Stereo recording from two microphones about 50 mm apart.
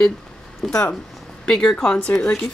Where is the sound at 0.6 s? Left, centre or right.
Centre.